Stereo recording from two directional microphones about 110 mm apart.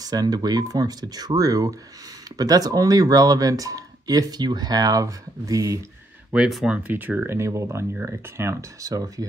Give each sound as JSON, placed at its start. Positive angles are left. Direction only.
{"t": 0.0, "sound": "speech", "side_deg": -35}
{"t": 6.3, "sound": "speech", "side_deg": -5}